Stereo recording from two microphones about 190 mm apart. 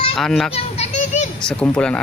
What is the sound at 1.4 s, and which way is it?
Speech, 5° left (ahead or behind).